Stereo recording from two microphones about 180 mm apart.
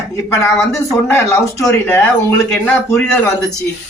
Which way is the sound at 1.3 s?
15° left (ahead or behind).